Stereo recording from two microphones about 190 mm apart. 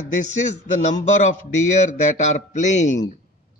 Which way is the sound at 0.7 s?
40° left (ahead or behind).